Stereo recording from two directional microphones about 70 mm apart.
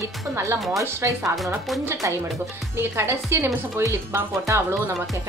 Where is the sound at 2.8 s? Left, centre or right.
Right.